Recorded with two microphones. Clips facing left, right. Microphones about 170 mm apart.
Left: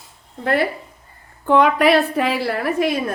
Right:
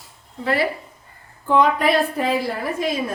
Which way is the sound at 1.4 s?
65° left (ahead or behind).